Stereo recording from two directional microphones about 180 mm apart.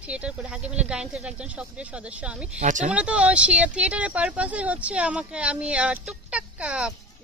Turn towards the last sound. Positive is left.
turn(degrees=-5)  # may be behind; listen again after turning